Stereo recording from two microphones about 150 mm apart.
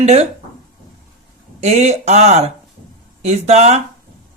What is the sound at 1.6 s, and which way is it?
Speech, 45° right (ahead or behind).